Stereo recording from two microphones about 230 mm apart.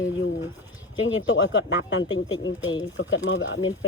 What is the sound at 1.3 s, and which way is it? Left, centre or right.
Speech, left.